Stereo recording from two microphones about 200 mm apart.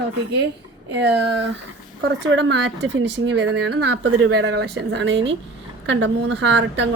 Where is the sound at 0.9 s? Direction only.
60° right (ahead or behind).